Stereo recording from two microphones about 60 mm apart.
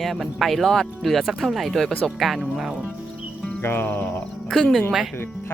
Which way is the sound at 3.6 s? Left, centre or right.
Left.